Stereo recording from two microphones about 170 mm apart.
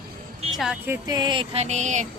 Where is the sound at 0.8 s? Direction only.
15° right (ahead or behind).